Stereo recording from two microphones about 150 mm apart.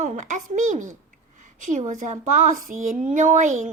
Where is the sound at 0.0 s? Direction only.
55° right (ahead or behind).